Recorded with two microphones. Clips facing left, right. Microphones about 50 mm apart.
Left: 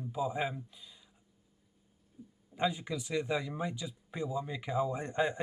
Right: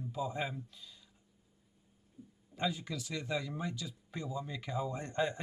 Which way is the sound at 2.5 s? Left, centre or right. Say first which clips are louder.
Left 4 dB; centre.